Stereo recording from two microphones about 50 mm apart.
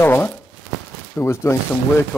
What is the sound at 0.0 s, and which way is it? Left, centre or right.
Speech, left.